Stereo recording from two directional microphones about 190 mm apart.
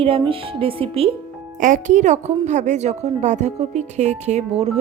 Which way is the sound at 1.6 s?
40° right (ahead or behind).